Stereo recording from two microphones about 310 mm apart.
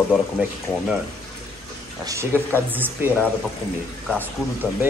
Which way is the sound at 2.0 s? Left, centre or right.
Centre.